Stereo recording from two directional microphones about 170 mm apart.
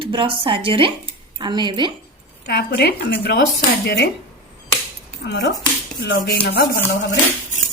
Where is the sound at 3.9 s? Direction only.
85° left.